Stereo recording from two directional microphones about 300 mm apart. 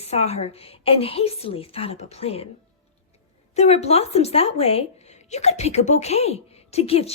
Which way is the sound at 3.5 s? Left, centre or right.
Left.